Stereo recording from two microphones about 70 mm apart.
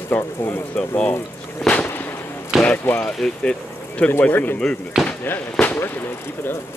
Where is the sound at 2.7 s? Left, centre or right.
Centre.